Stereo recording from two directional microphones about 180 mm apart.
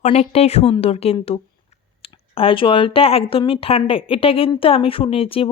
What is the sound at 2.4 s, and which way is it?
A woman's voice, 30° left (ahead or behind).